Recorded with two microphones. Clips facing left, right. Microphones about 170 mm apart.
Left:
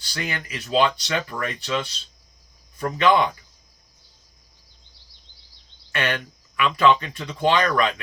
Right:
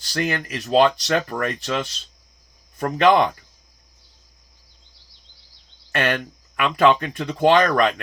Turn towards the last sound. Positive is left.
turn(degrees=-45)  # may be behind; listen again after turning